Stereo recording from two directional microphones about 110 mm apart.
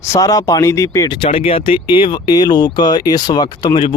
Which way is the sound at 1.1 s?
60° left (ahead or behind).